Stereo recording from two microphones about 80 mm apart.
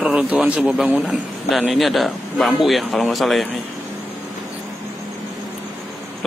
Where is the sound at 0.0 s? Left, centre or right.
Centre.